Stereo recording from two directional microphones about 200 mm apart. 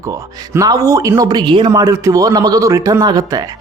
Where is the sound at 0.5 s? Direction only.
15° right (ahead or behind).